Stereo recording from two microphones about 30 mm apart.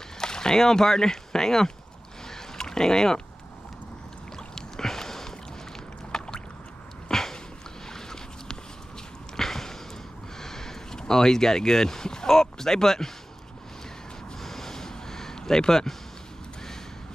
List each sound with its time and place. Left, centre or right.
0.2 s speech: left
2.2 s boat: centre
4.4 s rowboat: centre
6.1 s boat: left
7.1 s a sound: centre
10.3 s speech: centre
14.4 s a sound: centre